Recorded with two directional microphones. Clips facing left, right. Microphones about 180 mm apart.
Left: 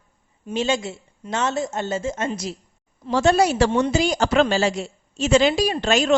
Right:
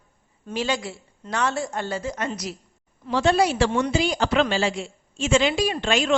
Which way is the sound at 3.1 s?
45° left (ahead or behind).